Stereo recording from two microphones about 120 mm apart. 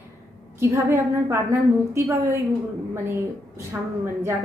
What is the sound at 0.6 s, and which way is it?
A woman's voice, 25° right (ahead or behind).